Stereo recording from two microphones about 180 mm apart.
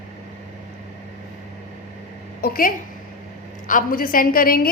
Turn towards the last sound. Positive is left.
turn(degrees=50)  # may be behind; listen again after turning